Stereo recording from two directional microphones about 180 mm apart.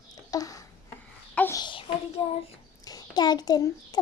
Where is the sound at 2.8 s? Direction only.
20° left (ahead or behind).